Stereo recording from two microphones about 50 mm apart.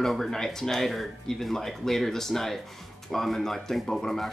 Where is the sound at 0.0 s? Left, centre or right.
Centre.